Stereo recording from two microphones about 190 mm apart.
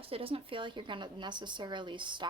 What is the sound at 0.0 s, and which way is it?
A woman's voice, 30° right (ahead or behind).